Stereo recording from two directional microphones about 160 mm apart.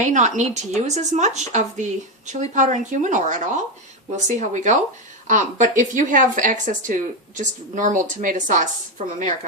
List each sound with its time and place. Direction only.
0.1 s speech: 50° right (ahead or behind)